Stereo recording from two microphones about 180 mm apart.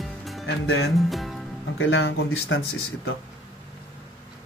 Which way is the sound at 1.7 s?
90° left.